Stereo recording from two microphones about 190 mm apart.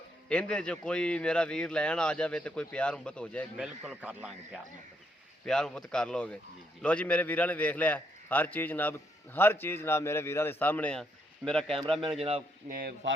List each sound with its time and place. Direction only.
0.3 s speech: 5° left (ahead or behind)
3.6 s a man's voice: 5° right (ahead or behind)
12.6 s a man's voice: 50° right (ahead or behind)